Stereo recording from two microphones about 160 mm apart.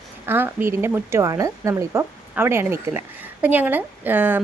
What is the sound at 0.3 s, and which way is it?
A woman's voice, 15° right (ahead or behind).